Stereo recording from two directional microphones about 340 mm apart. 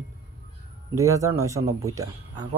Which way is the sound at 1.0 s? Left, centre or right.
Centre.